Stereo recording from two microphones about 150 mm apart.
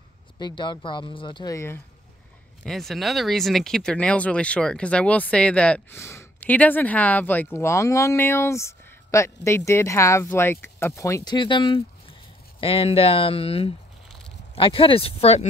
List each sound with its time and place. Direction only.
0.4 s speech: 30° left (ahead or behind)
2.6 s speech: centre (ahead or behind); by 11.3 s 20° left (ahead or behind)
11.3 s speech: 30° left (ahead or behind)